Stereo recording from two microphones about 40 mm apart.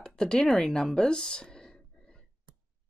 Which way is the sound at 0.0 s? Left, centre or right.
Centre.